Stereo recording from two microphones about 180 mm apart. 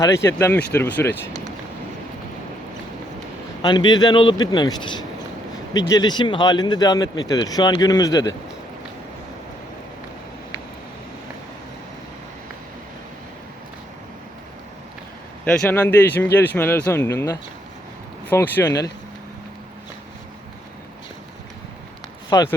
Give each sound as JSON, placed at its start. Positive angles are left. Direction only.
{"t": 0.0, "sound": "speech", "side_deg": 15}
{"t": 3.6, "sound": "speech", "side_deg": 25}
{"t": 15.5, "sound": "speech", "side_deg": 10}
{"t": 22.3, "sound": "speech", "side_deg": 20}